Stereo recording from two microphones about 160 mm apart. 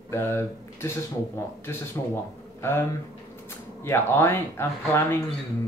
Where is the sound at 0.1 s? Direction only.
15° left (ahead or behind).